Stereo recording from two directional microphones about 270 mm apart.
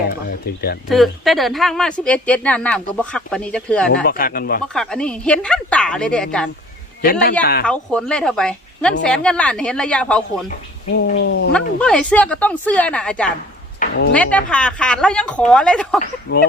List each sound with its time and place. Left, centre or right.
0.4 s speech: left
0.9 s speech: centre
4.0 s speech: left
4.6 s speech: centre
7.0 s speech: left
7.6 s speech: centre
10.9 s speech: left
11.5 s speech: centre
13.7 s a sound: left
14.1 s speech: centre
16.0 s speech: left